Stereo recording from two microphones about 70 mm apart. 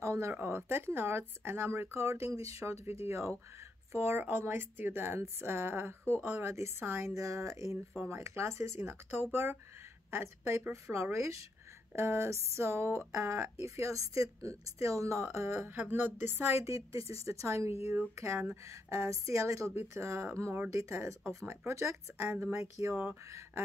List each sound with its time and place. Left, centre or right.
0.0 s a sound: right
0.3 s a woman's voice: right
15.7 s a woman's voice: right
22.4 s a woman's voice: right